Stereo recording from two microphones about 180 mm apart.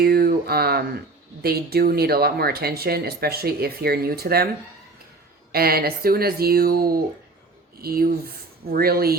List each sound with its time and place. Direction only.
0.0 s speech: 60° right (ahead or behind)
5.5 s speech: 60° right (ahead or behind)